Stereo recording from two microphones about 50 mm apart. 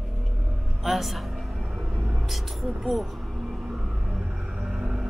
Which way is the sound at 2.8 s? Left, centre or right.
Centre.